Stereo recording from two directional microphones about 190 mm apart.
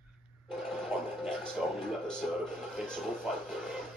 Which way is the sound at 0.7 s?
Centre (ahead or behind).